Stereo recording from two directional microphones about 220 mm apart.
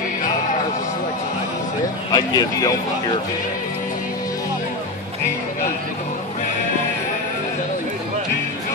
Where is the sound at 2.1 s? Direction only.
20° left (ahead or behind).